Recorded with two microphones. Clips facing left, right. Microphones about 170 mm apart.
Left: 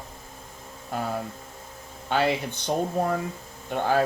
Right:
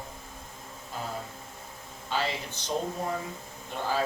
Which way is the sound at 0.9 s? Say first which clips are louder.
Left 7 dB; 60° left (ahead or behind).